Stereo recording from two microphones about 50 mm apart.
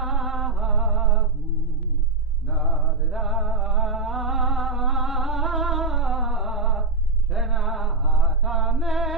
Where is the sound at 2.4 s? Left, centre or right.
Centre.